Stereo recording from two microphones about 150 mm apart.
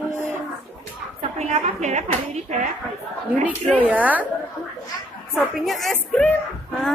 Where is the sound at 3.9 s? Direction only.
10° right (ahead or behind).